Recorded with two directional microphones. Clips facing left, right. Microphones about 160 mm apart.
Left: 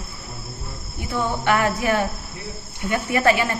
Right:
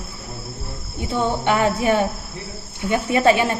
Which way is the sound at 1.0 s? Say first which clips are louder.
Right 3 dB; 20° right (ahead or behind).